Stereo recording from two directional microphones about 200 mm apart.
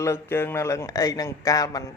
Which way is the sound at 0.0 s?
10° left (ahead or behind).